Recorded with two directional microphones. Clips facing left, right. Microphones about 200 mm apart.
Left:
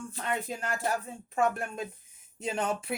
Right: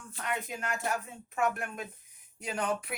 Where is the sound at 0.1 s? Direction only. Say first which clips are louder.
Left 1 dB; 30° left (ahead or behind).